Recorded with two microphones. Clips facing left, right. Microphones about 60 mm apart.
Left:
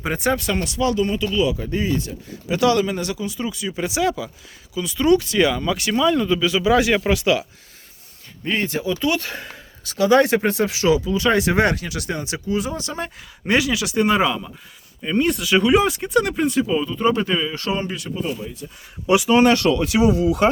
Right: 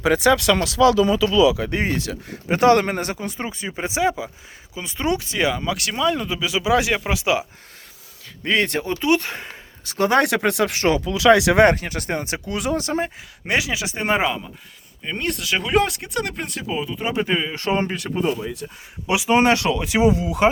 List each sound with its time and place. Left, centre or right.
0.0 s speech: right
1.5 s speech: right
2.5 s speech: right; by 5.7 s centre
5.7 s speech: centre
8.4 s speech: right
9.0 s speech: right
9.8 s speech: right
11.1 s speech: right
11.6 s speech: right
12.5 s speech: right
13.7 s speech: right
15.0 s speech: centre
16.6 s speech: centre; by 18.6 s right
19.0 s speech: centre